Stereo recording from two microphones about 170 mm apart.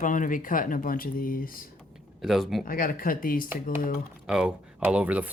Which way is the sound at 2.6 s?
55° left (ahead or behind).